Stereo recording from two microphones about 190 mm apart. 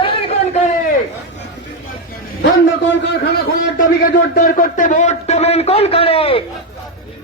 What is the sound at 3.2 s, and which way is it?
A man's voice, 50° left (ahead or behind).